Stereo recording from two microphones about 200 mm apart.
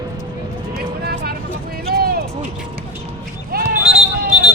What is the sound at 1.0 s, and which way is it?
Music, 50° right (ahead or behind).